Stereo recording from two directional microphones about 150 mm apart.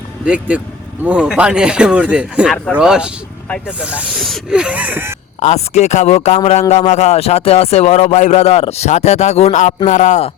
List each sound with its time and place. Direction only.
0.3 s speech: 10° right (ahead or behind)
5.4 s speech: 50° left (ahead or behind)